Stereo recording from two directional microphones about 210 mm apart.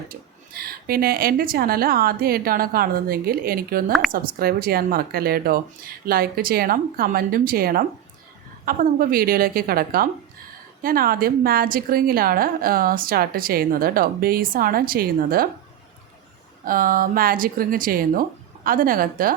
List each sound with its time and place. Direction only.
0.1 s a woman's voice: 45° right (ahead or behind)
16.6 s speech: 40° right (ahead or behind)